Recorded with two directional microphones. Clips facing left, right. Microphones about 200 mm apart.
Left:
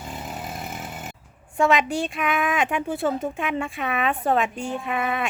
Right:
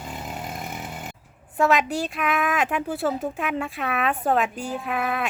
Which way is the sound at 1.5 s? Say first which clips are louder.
Left 1 dB; centre (ahead or behind).